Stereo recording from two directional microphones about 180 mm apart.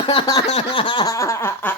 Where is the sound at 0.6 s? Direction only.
30° left (ahead or behind).